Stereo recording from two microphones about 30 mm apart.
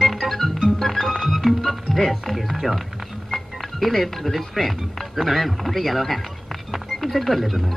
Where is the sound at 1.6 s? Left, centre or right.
Centre.